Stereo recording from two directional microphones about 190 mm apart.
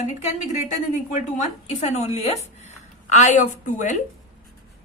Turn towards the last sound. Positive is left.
turn(degrees=40)  # may be behind; listen again after turning